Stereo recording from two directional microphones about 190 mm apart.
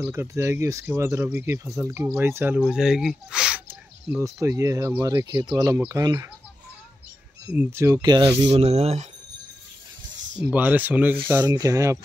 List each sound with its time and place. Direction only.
0.0 s speech: 15° right (ahead or behind)
7.4 s speech: 10° right (ahead or behind)
8.5 s speech: 35° right (ahead or behind)
10.4 s speech: 10° right (ahead or behind)